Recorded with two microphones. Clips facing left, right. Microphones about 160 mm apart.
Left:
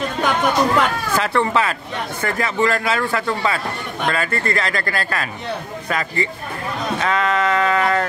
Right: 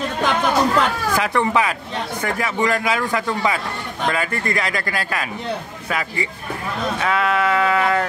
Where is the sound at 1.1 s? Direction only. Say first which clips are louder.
Left 1 dB; 15° right (ahead or behind).